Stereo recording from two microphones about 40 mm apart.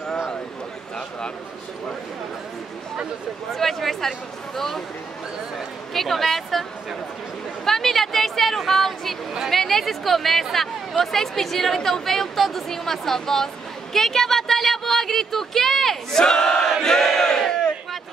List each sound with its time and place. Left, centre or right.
3.5 s a woman's voice: centre
5.9 s speech: centre
7.6 s chatter: centre
9.5 s a woman's voice: centre
13.9 s a sound: centre
16.2 s a woman's voice: centre
16.8 s battle cry: centre